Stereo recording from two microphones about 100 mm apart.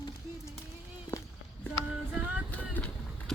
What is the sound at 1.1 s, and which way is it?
Walk, 25° left (ahead or behind).